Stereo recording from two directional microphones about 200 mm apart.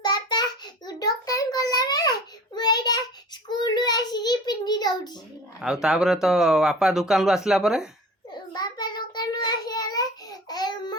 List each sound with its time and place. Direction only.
0.0 s child singing: 20° left (ahead or behind)
3.5 s a sound: 20° left (ahead or behind)
5.5 s speech: 5° right (ahead or behind)
8.3 s child singing: 20° left (ahead or behind)